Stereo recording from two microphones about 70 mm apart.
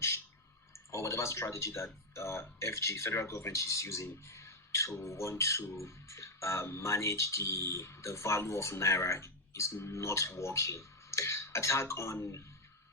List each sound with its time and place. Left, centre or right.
0.7 s speech: left